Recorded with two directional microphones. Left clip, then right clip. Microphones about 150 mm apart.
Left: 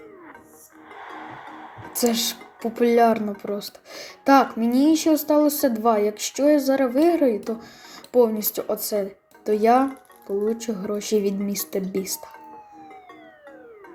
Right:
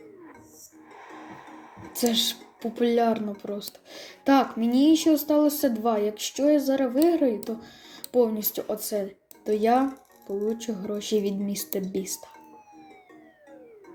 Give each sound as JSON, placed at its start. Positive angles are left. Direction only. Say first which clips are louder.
{"t": 2.0, "sound": "speech", "louder": "left 2 dB", "side_deg": 15}